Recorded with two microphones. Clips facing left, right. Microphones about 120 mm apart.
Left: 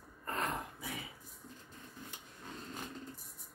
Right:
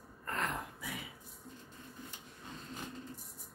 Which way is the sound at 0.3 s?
25° left (ahead or behind).